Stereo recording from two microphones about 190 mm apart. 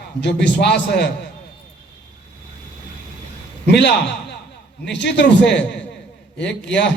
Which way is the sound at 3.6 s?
60° left (ahead or behind).